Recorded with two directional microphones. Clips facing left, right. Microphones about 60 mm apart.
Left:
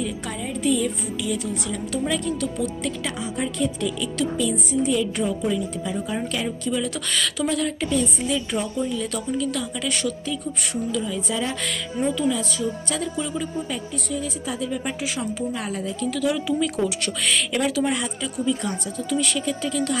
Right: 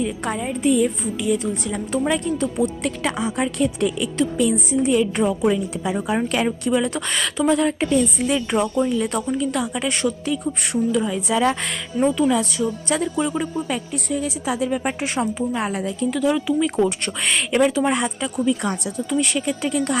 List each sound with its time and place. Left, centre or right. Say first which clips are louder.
0.0 s speech: right 5 dB; right
2.6 s speech: right 4 dB; right
3.3 s speech: right 1 dB; right
3.8 s speech: right 4 dB; right
5.4 s speech: right 4 dB; right
11.6 s speech: right 4 dB; right
14.4 s speech: right 5 dB; right
15.9 s speech: right 3 dB; right
16.8 s speech: right 3 dB; right
17.8 s speech: right 4 dB; right